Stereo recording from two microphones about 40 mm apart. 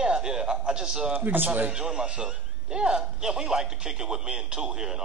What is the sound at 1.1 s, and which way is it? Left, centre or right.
Speech, right.